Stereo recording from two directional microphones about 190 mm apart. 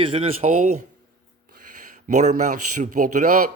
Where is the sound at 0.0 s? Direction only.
30° right (ahead or behind); by 3.5 s 50° right (ahead or behind).